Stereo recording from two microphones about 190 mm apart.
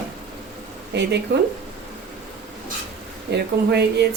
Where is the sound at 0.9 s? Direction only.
65° right (ahead or behind).